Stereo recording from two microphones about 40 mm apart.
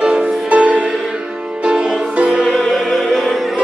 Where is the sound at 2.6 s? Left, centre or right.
Centre.